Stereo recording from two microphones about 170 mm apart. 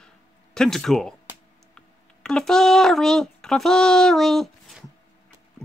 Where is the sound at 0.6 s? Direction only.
Centre (ahead or behind).